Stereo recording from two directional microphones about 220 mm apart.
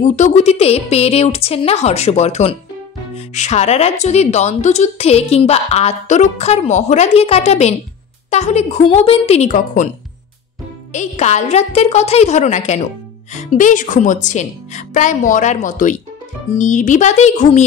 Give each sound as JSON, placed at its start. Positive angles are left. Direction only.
{"t": 0.0, "sound": "a woman's voice", "side_deg": 35}
{"t": 10.9, "sound": "a woman's voice", "side_deg": 30}